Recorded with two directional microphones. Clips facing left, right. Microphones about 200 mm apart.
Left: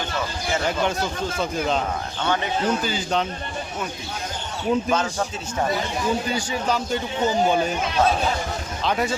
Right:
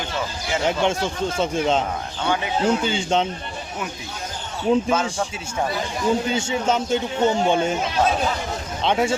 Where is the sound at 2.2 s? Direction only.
10° right (ahead or behind).